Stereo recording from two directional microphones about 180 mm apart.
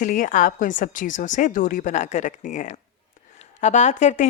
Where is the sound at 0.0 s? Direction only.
45° left (ahead or behind).